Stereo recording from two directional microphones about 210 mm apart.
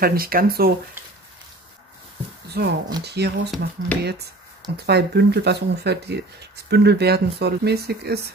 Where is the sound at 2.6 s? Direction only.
50° right (ahead or behind).